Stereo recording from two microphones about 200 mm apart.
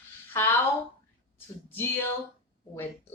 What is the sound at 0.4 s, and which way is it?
Speech, 10° left (ahead or behind).